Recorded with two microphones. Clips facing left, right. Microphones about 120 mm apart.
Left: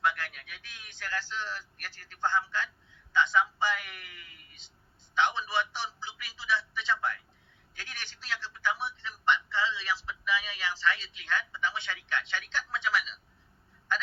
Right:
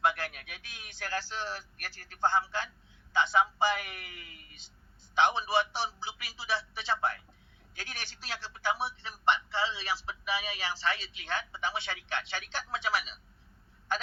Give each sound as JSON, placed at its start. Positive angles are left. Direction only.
{"t": 0.0, "sound": "speech", "side_deg": -35}